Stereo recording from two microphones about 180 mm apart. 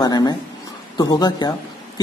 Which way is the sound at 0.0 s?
20° left (ahead or behind).